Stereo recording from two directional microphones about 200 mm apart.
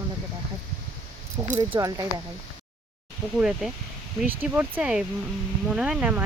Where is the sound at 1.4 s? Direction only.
15° right (ahead or behind).